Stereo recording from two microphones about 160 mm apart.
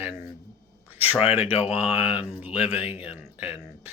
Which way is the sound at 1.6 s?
40° left (ahead or behind).